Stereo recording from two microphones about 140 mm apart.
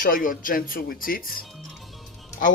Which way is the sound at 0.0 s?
80° left.